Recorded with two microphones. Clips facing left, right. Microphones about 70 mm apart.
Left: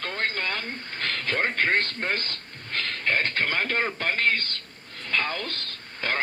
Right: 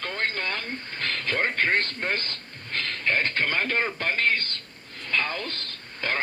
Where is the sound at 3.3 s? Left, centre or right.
Left.